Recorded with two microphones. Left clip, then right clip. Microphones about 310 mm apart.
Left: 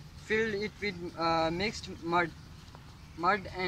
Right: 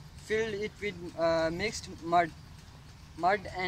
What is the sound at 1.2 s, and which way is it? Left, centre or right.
Speech, centre.